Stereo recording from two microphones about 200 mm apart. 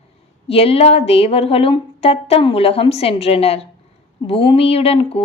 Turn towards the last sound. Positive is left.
turn(degrees=30)  # may be behind; listen again after turning